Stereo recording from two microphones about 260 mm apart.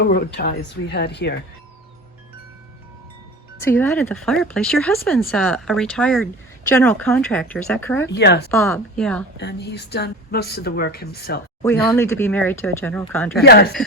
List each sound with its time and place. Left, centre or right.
0.0 s speech: left
3.6 s speech: centre
8.0 s speech: left
8.4 s speech: centre
9.4 s speech: left
11.6 s speech: centre
13.4 s speech: left